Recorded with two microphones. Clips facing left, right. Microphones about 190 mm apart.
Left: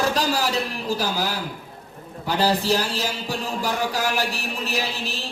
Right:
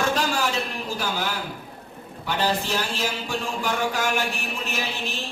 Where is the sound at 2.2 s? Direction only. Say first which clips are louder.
Left 4 dB; 35° left (ahead or behind).